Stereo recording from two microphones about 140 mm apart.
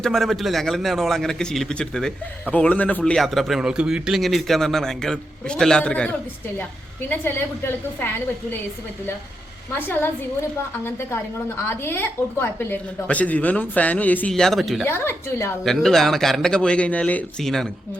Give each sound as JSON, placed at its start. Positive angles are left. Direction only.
{"t": 0.0, "sound": "a man's voice", "side_deg": 0}
{"t": 9.7, "sound": "speech", "side_deg": 15}
{"t": 11.7, "sound": "speech", "side_deg": 15}
{"t": 14.8, "sound": "speech", "side_deg": 15}
{"t": 15.6, "sound": "a man's voice", "side_deg": 5}